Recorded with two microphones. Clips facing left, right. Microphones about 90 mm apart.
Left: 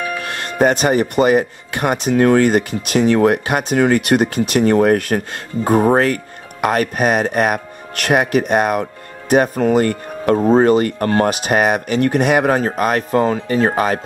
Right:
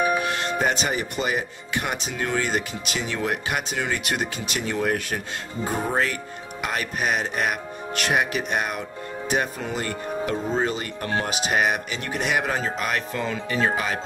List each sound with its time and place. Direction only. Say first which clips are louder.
0.0 s music: right 2 dB; 15° right (ahead or behind)
0.3 s speech: left 8 dB; 50° left (ahead or behind)